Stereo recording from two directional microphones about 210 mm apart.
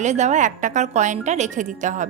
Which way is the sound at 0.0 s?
35° right (ahead or behind).